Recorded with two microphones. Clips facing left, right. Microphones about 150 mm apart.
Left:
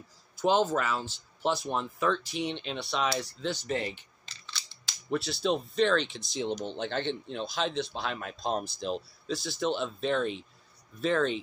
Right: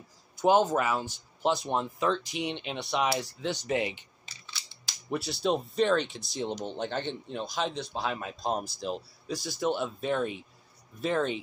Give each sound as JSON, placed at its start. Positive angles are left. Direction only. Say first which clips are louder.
{"t": 0.4, "sound": "speech", "louder": "right 2 dB", "side_deg": -15}
{"t": 4.3, "sound": "crushing", "louder": "left 2 dB", "side_deg": -5}
{"t": 5.1, "sound": "speech", "louder": "even", "side_deg": -10}